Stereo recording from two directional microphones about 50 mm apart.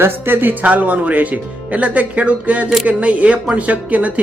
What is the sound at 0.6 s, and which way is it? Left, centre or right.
Speech, right.